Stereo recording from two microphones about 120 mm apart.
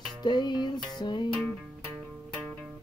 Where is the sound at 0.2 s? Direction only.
35° left (ahead or behind).